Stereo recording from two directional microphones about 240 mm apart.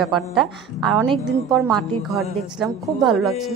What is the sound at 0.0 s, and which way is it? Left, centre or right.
A woman's voice, centre.